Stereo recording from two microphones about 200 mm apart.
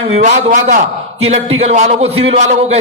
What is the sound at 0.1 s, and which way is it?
A man's voice, 35° right (ahead or behind).